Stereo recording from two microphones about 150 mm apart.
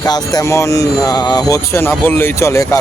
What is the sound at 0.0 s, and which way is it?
Speech, 25° left (ahead or behind).